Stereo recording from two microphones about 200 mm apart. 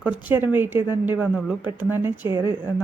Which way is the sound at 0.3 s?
10° right (ahead or behind).